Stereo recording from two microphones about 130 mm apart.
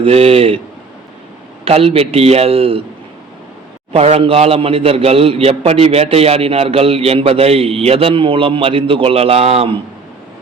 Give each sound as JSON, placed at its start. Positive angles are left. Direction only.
{"t": 0.0, "sound": "a man's voice", "side_deg": -50}
{"t": 1.6, "sound": "a man's voice", "side_deg": -50}
{"t": 3.9, "sound": "a man's voice", "side_deg": -55}